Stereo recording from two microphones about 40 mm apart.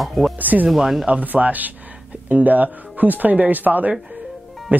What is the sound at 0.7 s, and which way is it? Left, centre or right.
Speech, centre.